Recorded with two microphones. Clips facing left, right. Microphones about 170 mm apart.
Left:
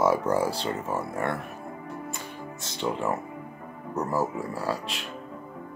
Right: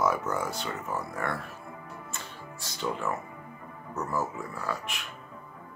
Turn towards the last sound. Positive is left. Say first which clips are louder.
# left 5 dB
turn(degrees=30)  # may be behind; listen again after turning